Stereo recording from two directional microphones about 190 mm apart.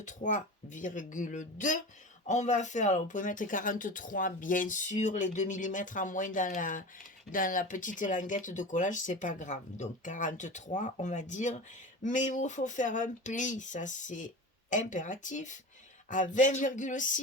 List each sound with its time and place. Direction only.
0.0 s speech: 40° left (ahead or behind)